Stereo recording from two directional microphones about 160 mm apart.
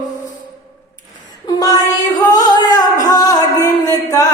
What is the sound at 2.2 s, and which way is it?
Singing, 25° left (ahead or behind).